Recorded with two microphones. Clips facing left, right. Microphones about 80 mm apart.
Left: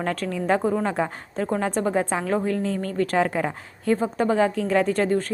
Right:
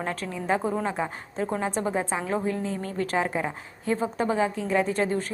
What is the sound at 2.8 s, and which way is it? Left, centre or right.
Speech, left.